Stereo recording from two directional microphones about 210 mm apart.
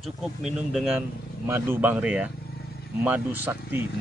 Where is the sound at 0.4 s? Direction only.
Centre (ahead or behind).